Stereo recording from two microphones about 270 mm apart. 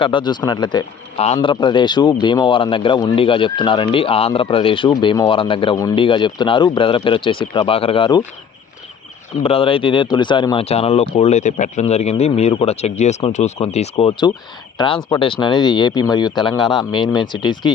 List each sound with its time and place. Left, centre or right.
0.0 s speech: centre
9.4 s speech: left